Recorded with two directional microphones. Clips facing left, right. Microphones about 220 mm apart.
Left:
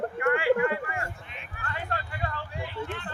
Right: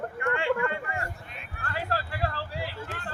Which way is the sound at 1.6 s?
35° right (ahead or behind).